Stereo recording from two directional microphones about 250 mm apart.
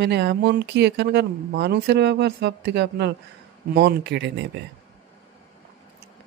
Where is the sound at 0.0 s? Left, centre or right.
Right.